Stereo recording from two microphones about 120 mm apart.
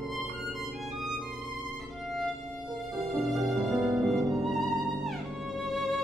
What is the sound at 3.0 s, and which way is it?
Violin, centre (ahead or behind).